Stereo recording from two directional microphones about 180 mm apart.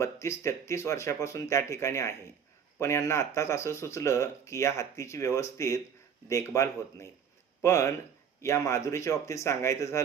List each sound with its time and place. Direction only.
0.0 s speech: 15° left (ahead or behind)